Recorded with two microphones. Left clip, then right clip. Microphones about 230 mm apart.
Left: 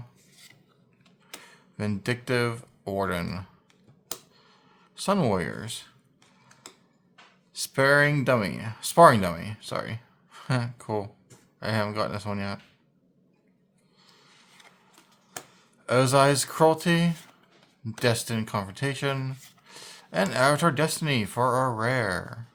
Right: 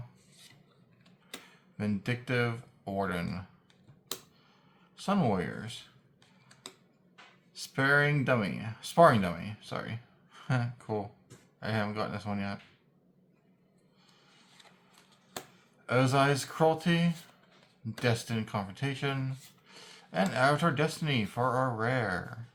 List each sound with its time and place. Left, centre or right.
1.5 s speech: left
4.9 s speech: left
7.5 s speech: left
15.9 s speech: left